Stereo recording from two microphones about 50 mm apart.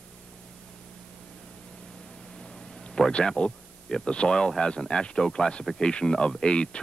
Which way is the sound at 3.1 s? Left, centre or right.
Centre.